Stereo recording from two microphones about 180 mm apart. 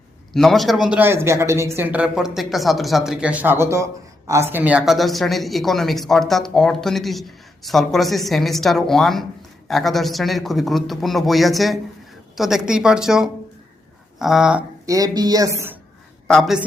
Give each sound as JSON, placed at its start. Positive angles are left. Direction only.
{"t": 0.3, "sound": "speech", "side_deg": 0}
{"t": 14.8, "sound": "a woman's voice", "side_deg": -20}
{"t": 16.2, "sound": "a woman's voice", "side_deg": 0}